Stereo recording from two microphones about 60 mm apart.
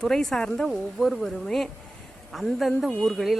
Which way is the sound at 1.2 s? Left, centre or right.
Centre.